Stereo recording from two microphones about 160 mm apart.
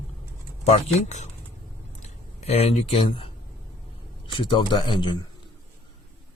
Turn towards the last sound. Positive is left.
turn(degrees=30)  # may be behind; listen again after turning